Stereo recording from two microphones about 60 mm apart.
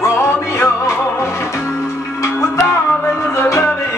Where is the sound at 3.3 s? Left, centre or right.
Left.